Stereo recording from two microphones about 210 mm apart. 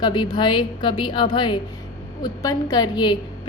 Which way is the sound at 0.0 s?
20° left (ahead or behind).